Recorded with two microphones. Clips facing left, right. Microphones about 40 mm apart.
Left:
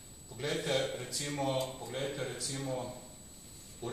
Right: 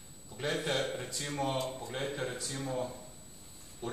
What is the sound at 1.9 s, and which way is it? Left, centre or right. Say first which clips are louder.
A man's voice: right 1 dB; centre.